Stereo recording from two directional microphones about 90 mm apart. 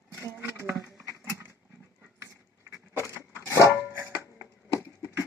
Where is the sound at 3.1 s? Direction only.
25° right (ahead or behind).